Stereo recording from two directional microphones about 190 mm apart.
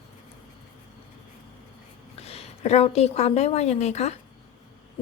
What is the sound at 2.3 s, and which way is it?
A woman's voice, 35° left (ahead or behind).